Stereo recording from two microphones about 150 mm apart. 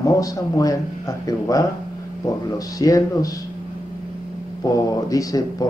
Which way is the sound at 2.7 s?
25° left (ahead or behind).